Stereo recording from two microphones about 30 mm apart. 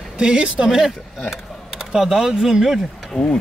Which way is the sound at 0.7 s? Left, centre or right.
Centre.